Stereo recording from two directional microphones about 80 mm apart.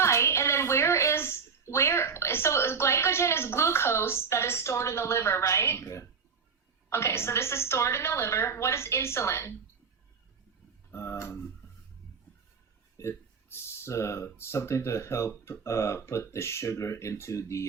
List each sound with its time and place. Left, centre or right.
0.0 s a woman's voice: left
10.9 s speech: left
13.0 s speech: left